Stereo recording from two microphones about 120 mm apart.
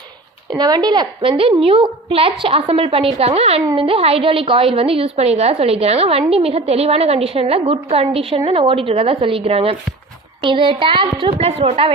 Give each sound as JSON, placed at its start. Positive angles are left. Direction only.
{"t": 0.5, "sound": "a woman's voice", "side_deg": -35}